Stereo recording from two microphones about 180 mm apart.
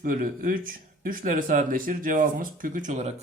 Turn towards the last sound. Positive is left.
turn(degrees=-40)  # may be behind; listen again after turning